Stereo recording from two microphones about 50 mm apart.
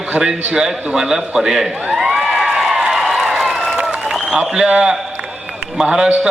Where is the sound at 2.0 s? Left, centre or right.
Centre.